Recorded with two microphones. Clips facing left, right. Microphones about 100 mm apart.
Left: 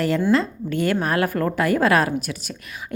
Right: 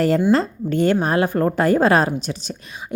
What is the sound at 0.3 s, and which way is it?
A woman's voice, 35° right (ahead or behind).